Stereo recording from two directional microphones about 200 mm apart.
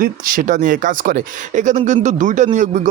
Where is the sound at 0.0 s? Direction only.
45° right (ahead or behind).